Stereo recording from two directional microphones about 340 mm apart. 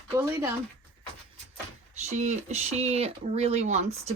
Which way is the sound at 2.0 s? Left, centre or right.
Centre.